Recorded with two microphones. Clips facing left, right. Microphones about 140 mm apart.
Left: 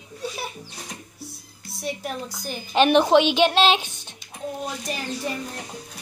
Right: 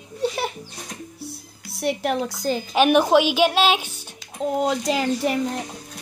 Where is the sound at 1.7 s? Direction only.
70° right (ahead or behind); by 2.6 s 90° right.